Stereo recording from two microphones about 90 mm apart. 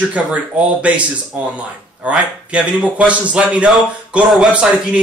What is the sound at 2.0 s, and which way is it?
Speech, 15° right (ahead or behind).